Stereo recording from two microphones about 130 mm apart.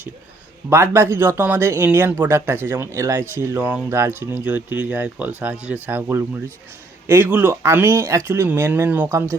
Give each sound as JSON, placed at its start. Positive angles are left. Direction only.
{"t": 0.7, "sound": "speech", "side_deg": -20}